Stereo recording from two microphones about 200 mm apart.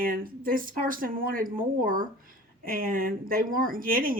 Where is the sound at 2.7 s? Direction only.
45° right (ahead or behind).